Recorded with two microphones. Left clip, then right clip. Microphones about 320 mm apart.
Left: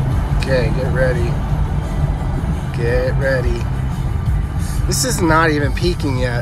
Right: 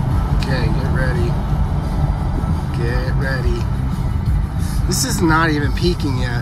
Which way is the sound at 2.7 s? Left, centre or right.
Centre.